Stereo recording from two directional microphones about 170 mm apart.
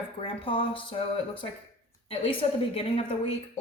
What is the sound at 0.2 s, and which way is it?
Speech, 30° left (ahead or behind).